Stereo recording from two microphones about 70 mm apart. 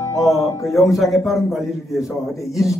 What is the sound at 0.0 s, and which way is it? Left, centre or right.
Music, left.